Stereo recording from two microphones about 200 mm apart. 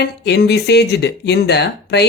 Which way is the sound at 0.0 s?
55° left (ahead or behind).